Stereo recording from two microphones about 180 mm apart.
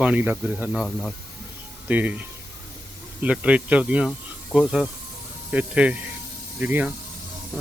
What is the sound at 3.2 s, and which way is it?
Speech, 5° right (ahead or behind).